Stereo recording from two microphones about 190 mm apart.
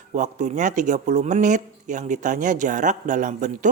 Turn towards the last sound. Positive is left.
turn(degrees=-40)  # may be behind; listen again after turning